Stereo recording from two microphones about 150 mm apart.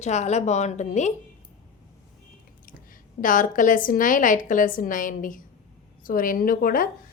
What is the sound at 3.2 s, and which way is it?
A woman's voice, 60° left (ahead or behind).